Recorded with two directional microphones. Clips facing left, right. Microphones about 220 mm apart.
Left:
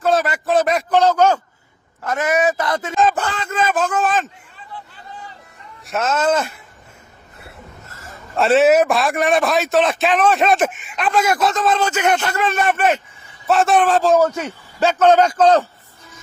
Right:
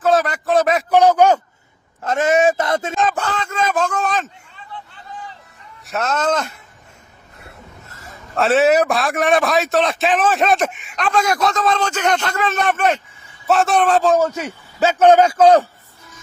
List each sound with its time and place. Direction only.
0.0 s a man's voice: centre (ahead or behind)
0.9 s a sound: 15° right (ahead or behind)
2.0 s speech: 25° right (ahead or behind)
3.0 s a man's voice: 5° left (ahead or behind)
5.8 s a man's voice: centre (ahead or behind)
8.0 s a man's voice: centre (ahead or behind)